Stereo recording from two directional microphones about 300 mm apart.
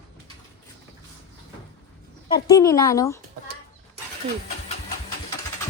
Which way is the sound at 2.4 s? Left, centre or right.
Centre.